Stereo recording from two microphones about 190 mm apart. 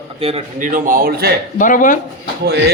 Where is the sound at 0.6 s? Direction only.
45° right (ahead or behind).